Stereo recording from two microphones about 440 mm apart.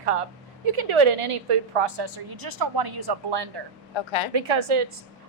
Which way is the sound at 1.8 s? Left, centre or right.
Right.